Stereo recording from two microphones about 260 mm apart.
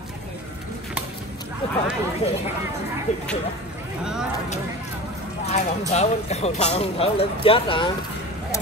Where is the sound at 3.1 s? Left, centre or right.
Left.